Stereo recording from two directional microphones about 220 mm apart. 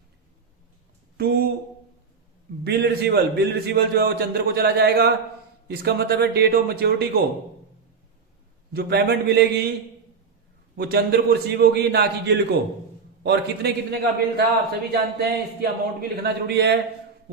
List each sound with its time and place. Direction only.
1.1 s a sound: 45° right (ahead or behind)
2.6 s a man's voice: 45° right (ahead or behind)
8.7 s a man's voice: 45° right (ahead or behind)
10.8 s a man's voice: 45° right (ahead or behind)